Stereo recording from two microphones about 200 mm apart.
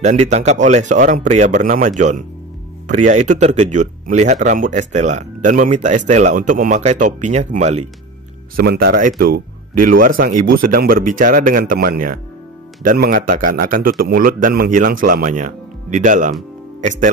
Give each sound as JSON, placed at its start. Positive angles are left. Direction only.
{"t": 0.0, "sound": "speech", "side_deg": -35}
{"t": 8.5, "sound": "speech", "side_deg": -50}